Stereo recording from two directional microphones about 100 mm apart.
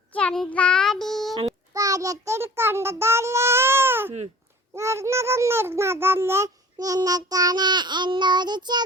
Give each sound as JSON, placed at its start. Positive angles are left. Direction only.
{"t": 0.1, "sound": "child singing", "side_deg": 10}
{"t": 1.7, "sound": "a child's voice", "side_deg": -35}
{"t": 6.7, "sound": "child singing", "side_deg": -35}